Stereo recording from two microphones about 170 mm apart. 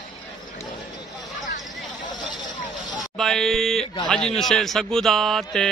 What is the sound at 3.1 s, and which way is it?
Speech, centre (ahead or behind).